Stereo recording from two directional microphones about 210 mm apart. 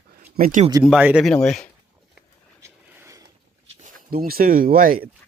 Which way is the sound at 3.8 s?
40° right (ahead or behind).